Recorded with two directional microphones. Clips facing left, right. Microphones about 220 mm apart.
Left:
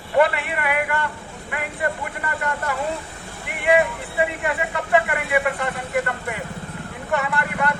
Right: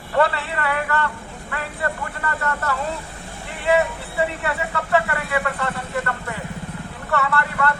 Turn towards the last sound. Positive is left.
turn(degrees=15)  # may be behind; listen again after turning